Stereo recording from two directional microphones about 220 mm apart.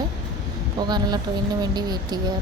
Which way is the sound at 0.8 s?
20° right (ahead or behind).